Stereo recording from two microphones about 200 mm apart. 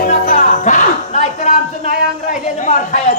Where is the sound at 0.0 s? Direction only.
40° left (ahead or behind).